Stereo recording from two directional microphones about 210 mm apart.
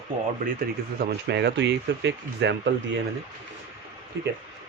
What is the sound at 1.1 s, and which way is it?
Speech, 55° right (ahead or behind).